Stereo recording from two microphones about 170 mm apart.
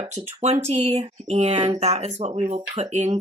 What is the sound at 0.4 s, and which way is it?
Speech, 40° right (ahead or behind).